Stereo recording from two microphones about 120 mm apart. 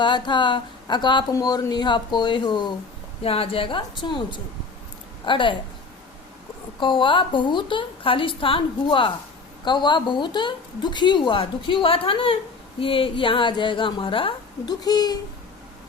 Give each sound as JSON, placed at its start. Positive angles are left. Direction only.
{"t": 0.0, "sound": "speech", "side_deg": 40}
{"t": 3.2, "sound": "a woman's voice", "side_deg": 50}
{"t": 6.7, "sound": "a woman's voice", "side_deg": 40}
{"t": 14.8, "sound": "speech", "side_deg": 35}